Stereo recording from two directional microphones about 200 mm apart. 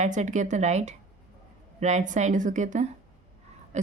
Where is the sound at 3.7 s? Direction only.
35° right (ahead or behind).